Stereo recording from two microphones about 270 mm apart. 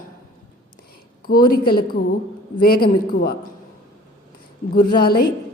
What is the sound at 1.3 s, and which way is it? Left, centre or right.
A woman's voice, left.